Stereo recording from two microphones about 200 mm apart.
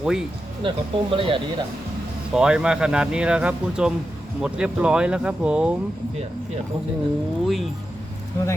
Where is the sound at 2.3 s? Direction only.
5° right (ahead or behind).